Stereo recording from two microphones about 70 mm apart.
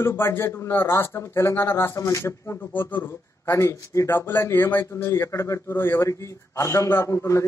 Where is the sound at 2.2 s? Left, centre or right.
Left.